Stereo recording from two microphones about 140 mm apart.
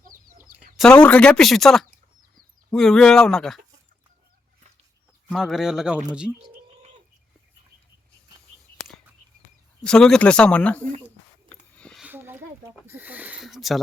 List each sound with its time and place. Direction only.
0.0 s chicken: 75° right (ahead or behind)
0.8 s speech: 5° left (ahead or behind)
5.3 s speech: centre (ahead or behind)
9.8 s speech: 5° left (ahead or behind)
11.4 s a sound: 10° left (ahead or behind)
12.0 s a sound: 15° right (ahead or behind)
12.9 s speech: 10° right (ahead or behind)
13.4 s speech: centre (ahead or behind)